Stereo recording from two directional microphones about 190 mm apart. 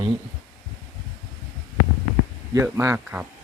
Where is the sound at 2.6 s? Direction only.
15° right (ahead or behind).